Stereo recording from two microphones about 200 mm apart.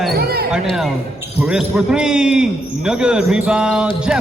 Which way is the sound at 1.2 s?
5° right (ahead or behind).